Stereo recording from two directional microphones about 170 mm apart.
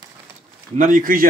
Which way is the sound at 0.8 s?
50° right (ahead or behind).